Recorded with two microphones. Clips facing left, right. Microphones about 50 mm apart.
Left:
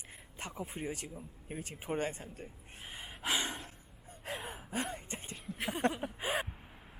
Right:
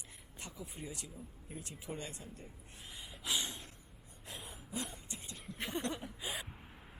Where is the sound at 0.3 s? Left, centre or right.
Left.